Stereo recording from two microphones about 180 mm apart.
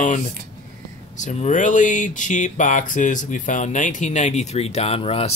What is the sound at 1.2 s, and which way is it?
Speech, 40° left (ahead or behind).